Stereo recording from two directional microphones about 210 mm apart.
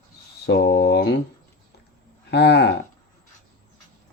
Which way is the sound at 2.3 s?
50° left (ahead or behind).